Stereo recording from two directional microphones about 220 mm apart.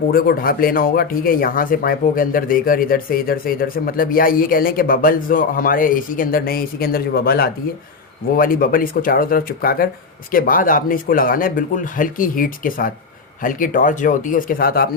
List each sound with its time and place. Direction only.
0.1 s speech: 40° left (ahead or behind)